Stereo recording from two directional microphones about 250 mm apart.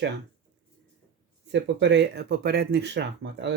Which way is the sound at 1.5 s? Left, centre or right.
Right.